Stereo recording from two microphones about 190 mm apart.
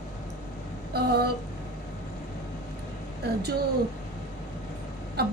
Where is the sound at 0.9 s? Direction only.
55° right (ahead or behind).